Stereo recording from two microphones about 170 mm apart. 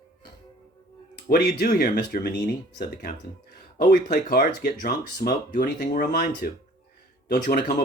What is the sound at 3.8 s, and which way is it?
Speech, 50° left (ahead or behind).